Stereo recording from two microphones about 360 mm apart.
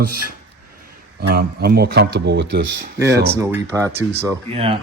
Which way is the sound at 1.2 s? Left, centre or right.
Right.